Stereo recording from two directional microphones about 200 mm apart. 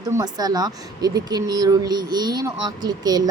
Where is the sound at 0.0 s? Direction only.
15° right (ahead or behind).